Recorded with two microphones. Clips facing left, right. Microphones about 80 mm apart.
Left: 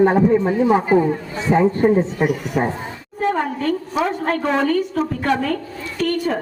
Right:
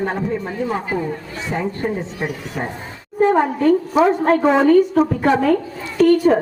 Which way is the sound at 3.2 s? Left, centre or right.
Centre.